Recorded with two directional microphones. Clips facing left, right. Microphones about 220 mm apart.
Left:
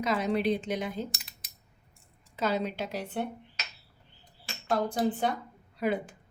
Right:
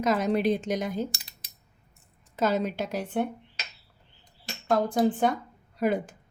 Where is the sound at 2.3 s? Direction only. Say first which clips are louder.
Right 4 dB; 45° right (ahead or behind).